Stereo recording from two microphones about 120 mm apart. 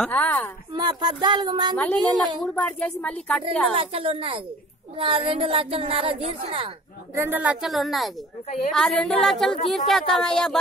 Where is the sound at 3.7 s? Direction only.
50° right (ahead or behind).